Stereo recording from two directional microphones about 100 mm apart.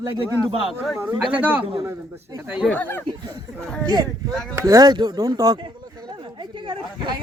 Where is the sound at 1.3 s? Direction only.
15° right (ahead or behind).